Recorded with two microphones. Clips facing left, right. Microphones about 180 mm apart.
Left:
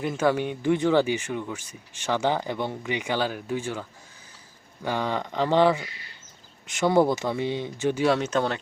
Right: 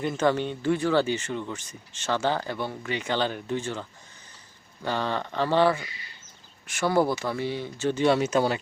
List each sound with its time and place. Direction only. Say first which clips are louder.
0.0 s speech: left 1 dB; 10° left (ahead or behind)
8.0 s speech: right 2 dB; 5° right (ahead or behind)